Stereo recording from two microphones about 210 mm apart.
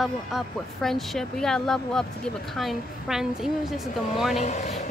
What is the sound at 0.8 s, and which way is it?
A woman's voice, centre (ahead or behind).